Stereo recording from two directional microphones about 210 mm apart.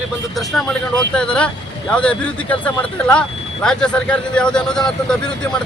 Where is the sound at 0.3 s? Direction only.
5° left (ahead or behind).